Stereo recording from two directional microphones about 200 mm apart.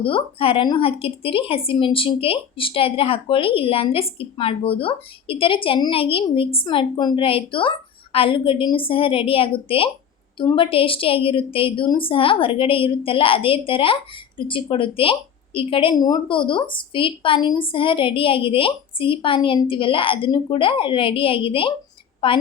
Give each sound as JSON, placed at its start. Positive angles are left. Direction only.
{"t": 0.0, "sound": "a woman's voice", "side_deg": 25}